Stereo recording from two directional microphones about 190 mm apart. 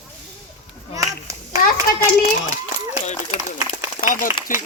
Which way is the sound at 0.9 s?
15° right (ahead or behind).